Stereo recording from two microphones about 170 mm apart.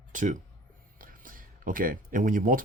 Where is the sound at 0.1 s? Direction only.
50° right (ahead or behind).